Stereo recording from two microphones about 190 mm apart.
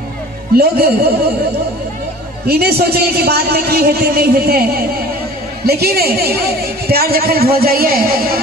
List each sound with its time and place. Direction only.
0.6 s a man's voice: 55° right (ahead or behind)
2.4 s a man's voice: 55° right (ahead or behind)